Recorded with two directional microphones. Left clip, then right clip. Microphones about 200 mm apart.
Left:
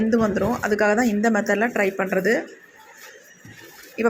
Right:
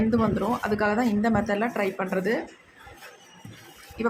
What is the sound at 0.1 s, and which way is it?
A woman's voice, 15° left (ahead or behind).